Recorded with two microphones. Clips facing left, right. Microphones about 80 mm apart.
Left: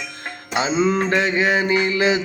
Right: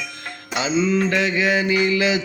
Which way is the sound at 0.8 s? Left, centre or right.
Left.